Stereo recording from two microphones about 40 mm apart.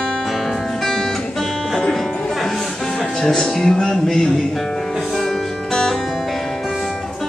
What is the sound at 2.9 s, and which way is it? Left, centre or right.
Music, centre.